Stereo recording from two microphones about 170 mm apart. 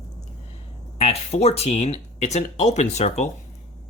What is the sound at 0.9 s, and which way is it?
Speech, 35° left (ahead or behind).